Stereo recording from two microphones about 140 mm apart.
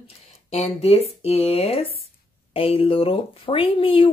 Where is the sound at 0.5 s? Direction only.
45° left (ahead or behind).